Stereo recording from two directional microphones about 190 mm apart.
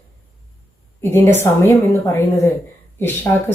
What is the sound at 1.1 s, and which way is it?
A woman's voice, 10° left (ahead or behind).